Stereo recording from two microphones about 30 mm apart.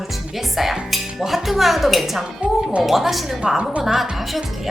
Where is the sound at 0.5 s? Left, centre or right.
Centre.